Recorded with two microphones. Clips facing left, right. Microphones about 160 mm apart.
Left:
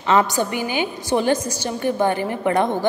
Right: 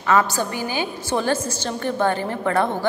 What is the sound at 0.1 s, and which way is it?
A woman's voice, 20° left (ahead or behind).